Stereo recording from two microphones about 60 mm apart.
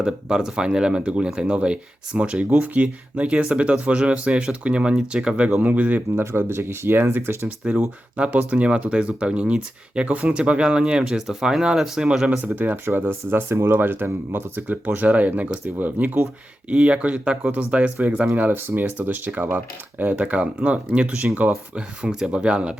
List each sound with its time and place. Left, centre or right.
0.0 s speech: centre
5.5 s speech: right
6.3 s speech: right
7.4 s speech: centre
12.5 s speech: right